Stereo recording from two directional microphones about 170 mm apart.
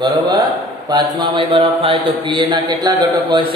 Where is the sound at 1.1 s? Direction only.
25° right (ahead or behind).